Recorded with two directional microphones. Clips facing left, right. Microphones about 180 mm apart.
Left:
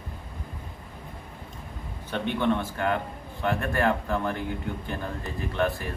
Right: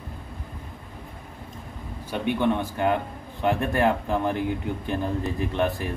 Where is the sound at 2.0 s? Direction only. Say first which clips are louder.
Right 2 dB; 10° right (ahead or behind).